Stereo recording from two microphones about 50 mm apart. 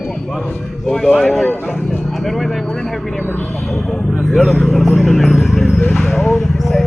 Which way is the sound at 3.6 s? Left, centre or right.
Centre.